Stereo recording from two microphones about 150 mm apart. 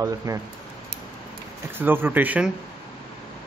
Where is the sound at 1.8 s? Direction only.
15° right (ahead or behind).